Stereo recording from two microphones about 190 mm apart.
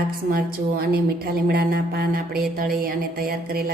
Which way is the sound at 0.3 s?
50° right (ahead or behind).